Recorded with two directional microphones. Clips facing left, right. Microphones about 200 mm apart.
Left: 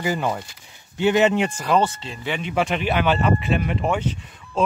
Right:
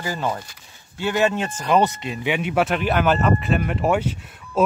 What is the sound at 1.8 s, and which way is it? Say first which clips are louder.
Speech: right 2 dB; 15° right (ahead or behind).